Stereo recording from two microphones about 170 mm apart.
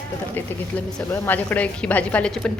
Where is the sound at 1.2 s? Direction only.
10° left (ahead or behind).